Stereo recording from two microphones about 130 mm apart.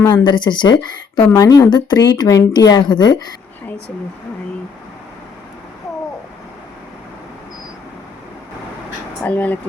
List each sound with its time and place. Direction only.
0.0 s a woman's voice: 35° left (ahead or behind)
1.2 s a woman's voice: 20° left (ahead or behind)
1.7 s a woman's voice: 30° left (ahead or behind)
9.2 s speech: 10° left (ahead or behind)